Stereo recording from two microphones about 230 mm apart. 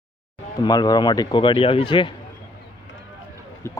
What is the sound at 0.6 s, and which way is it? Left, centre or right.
Speech, centre.